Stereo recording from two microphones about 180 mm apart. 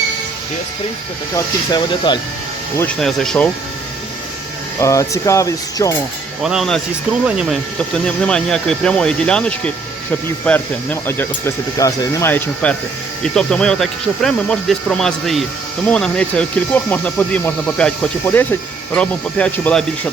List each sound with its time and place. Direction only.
1.7 s speech: 25° left (ahead or behind)
2.7 s speech: 5° left (ahead or behind)
4.8 s speech: 15° left (ahead or behind)
6.4 s speech: centre (ahead or behind)